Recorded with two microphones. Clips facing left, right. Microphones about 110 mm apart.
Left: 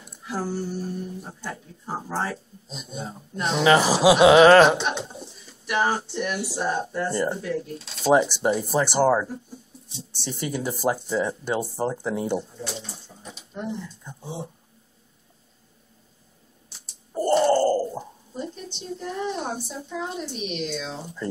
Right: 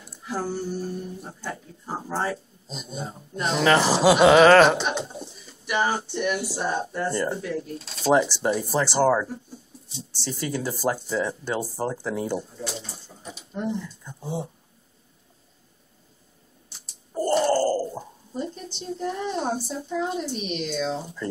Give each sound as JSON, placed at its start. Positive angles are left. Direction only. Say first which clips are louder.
{"t": 0.3, "sound": "speech", "louder": "even", "side_deg": 0}
{"t": 8.8, "sound": "speech", "louder": "even", "side_deg": 15}
{"t": 9.3, "sound": "a sound", "louder": "left 1 dB", "side_deg": 0}
{"t": 10.2, "sound": "speech", "louder": "even", "side_deg": 20}
{"t": 11.0, "sound": "speech", "louder": "left 1 dB", "side_deg": 0}
{"t": 11.2, "sound": "speech", "louder": "left 2 dB", "side_deg": 20}
{"t": 12.4, "sound": "pigeon", "louder": "even", "side_deg": 0}
{"t": 13.6, "sound": "speech", "louder": "right 3 dB", "side_deg": 0}
{"t": 16.6, "sound": "a sound", "louder": "even", "side_deg": 0}
{"t": 18.3, "sound": "speech", "louder": "right 2 dB", "side_deg": 0}